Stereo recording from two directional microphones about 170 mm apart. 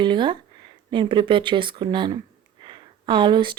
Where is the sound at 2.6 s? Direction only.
30° right (ahead or behind).